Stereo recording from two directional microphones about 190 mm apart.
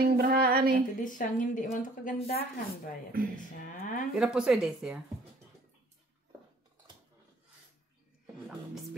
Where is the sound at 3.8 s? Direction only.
45° left (ahead or behind).